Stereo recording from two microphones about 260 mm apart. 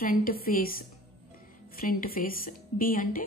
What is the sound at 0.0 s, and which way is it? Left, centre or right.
Speech, left.